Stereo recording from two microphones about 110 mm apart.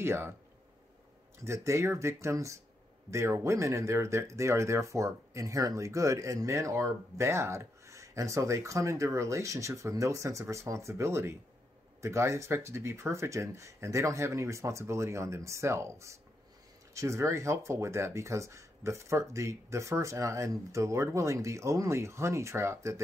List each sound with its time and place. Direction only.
0.0 s speech: 20° right (ahead or behind)
1.4 s speech: 25° right (ahead or behind)